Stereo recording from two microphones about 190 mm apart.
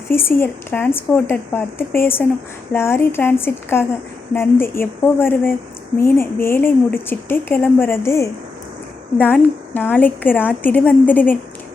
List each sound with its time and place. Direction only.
0.1 s speech: 10° left (ahead or behind)